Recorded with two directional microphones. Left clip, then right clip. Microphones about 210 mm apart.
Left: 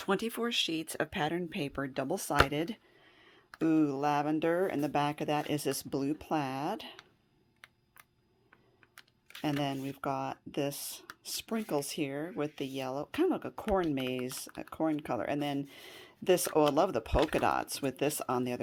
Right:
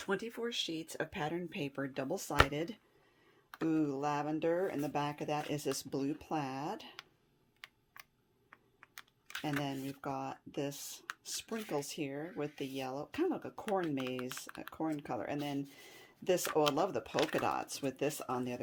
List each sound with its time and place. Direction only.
0.0 s speech: 40° left (ahead or behind)
8.4 s computer keyboard: 10° right (ahead or behind)
9.4 s speech: 35° left (ahead or behind)